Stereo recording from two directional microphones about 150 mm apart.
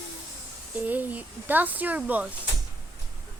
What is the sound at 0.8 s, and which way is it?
Speech, 10° right (ahead or behind).